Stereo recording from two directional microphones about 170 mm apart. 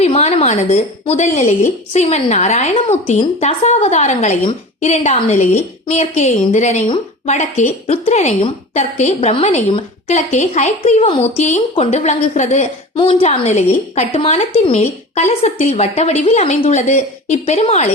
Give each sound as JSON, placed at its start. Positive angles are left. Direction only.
{"t": 0.0, "sound": "a woman's voice", "side_deg": 40}